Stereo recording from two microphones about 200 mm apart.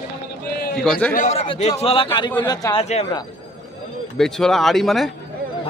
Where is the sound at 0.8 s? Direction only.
5° left (ahead or behind).